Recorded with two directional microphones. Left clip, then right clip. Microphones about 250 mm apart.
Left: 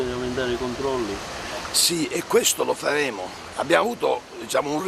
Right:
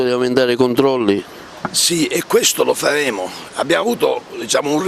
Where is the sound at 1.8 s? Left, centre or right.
Right.